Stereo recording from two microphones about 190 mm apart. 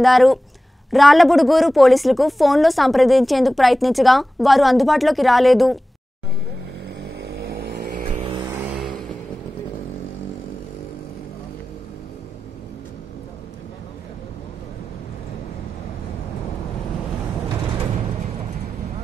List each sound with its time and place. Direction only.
0.0 s a woman's voice: centre (ahead or behind)
7.2 s vehicle: 55° right (ahead or behind)